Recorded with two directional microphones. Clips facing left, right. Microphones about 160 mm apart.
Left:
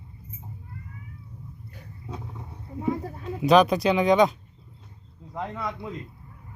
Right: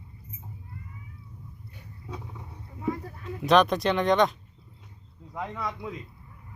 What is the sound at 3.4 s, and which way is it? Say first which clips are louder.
Speech: left 3 dB; 5° left (ahead or behind).